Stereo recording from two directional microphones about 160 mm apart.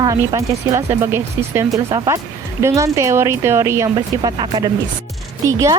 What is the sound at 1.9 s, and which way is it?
Speech, 25° right (ahead or behind).